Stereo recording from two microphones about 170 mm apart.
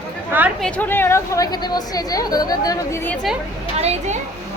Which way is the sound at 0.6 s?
10° left (ahead or behind).